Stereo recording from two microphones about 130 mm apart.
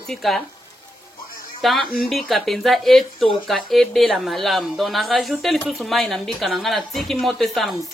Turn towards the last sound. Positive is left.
turn(degrees=0)  # may be behind; listen again after turning